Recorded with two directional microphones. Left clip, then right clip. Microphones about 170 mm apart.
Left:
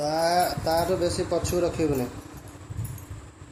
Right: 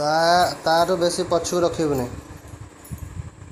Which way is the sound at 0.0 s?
20° right (ahead or behind).